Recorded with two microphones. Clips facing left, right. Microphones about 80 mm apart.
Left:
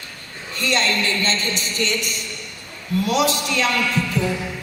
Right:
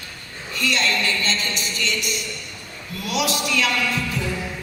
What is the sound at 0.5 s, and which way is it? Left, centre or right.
Speech, left.